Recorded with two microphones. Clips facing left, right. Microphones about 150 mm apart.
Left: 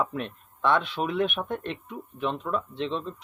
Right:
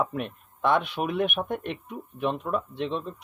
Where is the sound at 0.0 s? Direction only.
10° right (ahead or behind).